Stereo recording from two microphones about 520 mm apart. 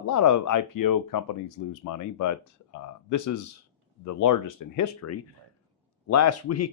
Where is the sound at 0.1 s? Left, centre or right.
Left.